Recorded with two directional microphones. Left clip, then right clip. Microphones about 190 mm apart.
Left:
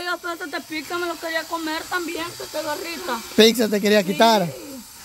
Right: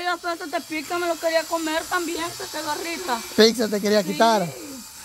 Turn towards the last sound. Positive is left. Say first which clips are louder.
# left 2 dB
turn(degrees=20)  # may be behind; listen again after turning